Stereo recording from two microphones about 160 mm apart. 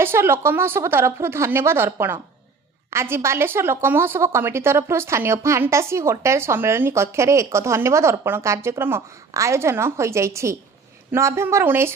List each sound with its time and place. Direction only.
0.0 s a woman's voice: 15° right (ahead or behind)